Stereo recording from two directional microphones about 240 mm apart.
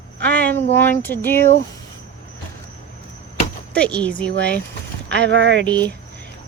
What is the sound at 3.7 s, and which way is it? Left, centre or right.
Speech, centre.